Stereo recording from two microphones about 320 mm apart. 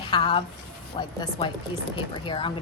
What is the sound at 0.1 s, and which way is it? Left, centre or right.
A woman's voice, centre.